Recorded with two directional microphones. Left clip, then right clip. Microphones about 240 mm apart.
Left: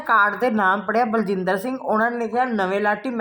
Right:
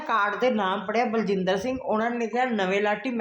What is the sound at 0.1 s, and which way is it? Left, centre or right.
Speech, left.